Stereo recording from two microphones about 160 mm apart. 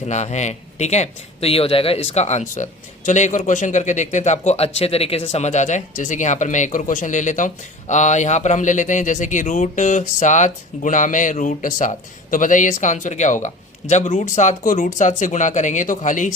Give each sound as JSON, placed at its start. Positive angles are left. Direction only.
{"t": 0.0, "sound": "a man's voice", "side_deg": 45}